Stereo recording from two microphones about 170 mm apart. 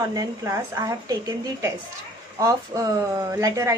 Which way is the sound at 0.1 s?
20° right (ahead or behind).